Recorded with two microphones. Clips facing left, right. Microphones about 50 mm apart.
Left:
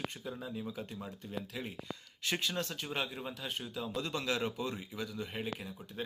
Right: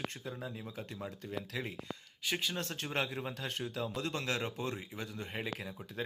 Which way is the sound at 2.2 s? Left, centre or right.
Centre.